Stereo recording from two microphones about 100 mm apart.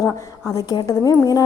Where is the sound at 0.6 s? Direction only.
40° left (ahead or behind).